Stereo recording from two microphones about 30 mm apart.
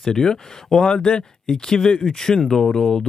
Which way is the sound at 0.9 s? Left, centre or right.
Left.